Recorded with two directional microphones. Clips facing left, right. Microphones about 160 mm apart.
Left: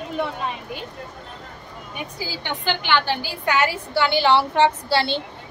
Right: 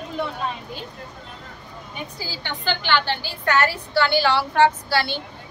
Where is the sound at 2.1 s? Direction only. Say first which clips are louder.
Left 3 dB; 15° left (ahead or behind).